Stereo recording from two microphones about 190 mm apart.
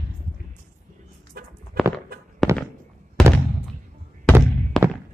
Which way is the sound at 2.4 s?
Centre (ahead or behind).